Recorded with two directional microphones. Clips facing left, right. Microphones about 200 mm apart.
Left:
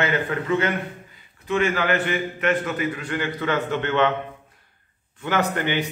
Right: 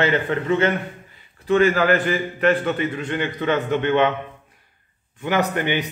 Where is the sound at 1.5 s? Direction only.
40° right (ahead or behind); by 4.1 s 15° right (ahead or behind).